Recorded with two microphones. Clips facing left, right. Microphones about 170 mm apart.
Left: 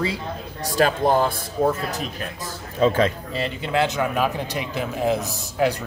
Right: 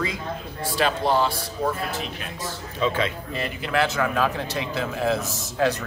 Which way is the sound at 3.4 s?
25° left (ahead or behind).